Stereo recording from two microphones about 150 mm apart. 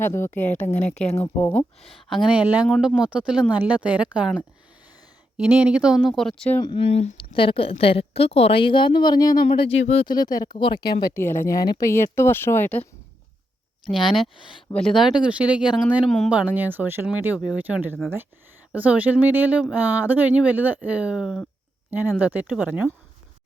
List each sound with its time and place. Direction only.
0.0 s speech: 15° left (ahead or behind)
1.8 s speech: centre (ahead or behind)
5.4 s speech: 10° right (ahead or behind)
6.6 s speech: 35° left (ahead or behind)
9.5 s speech: 40° left (ahead or behind)
10.1 s speech: 25° left (ahead or behind)
11.0 s speech: 15° left (ahead or behind)
13.9 s speech: centre (ahead or behind)
14.3 s speech: 35° left (ahead or behind)
14.7 s speech: centre (ahead or behind)
16.0 s speech: 5° left (ahead or behind)
16.3 s speech: 10° right (ahead or behind)
21.8 s speech: 15° right (ahead or behind)